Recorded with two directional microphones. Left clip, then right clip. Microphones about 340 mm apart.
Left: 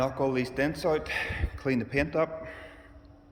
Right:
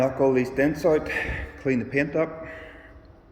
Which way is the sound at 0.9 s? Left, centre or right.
Centre.